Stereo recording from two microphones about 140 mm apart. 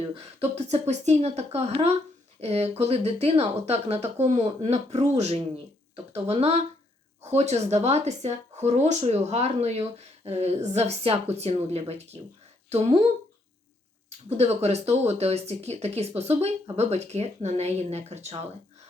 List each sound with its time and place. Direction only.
0.1 s speech: 50° right (ahead or behind)
14.3 s speech: 50° right (ahead or behind)